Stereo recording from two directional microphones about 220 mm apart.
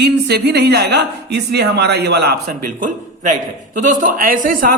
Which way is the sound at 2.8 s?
35° right (ahead or behind).